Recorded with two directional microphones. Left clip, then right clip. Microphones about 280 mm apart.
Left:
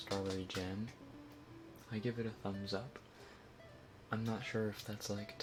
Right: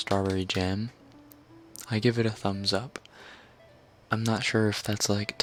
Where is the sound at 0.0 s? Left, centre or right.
Right.